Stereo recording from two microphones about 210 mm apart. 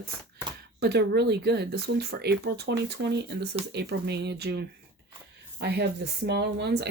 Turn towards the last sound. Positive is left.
turn(degrees=-55)  # may be behind; listen again after turning